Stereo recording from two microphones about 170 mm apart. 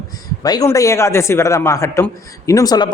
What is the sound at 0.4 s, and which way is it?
A man's voice, 20° left (ahead or behind).